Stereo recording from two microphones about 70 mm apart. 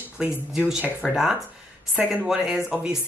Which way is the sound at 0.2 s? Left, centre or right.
Centre.